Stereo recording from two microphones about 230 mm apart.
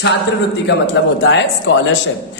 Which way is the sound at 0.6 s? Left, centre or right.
Left.